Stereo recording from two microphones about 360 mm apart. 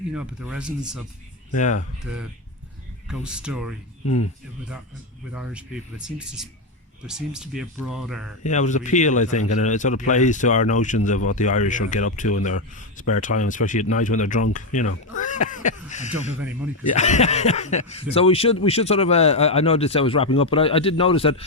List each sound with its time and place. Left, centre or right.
0.1 s speech: centre
1.5 s speech: centre
3.1 s speech: centre
5.3 s speech: centre
8.4 s speech: centre